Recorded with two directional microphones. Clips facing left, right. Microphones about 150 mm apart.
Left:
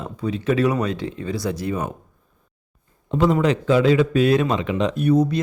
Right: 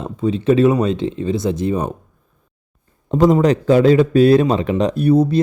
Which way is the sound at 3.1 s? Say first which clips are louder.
Right 5 dB; 40° right (ahead or behind).